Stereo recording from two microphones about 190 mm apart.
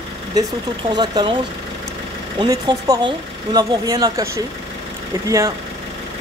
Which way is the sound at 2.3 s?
20° right (ahead or behind).